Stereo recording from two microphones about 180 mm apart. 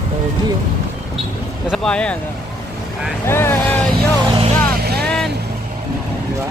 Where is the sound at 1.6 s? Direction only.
5° left (ahead or behind).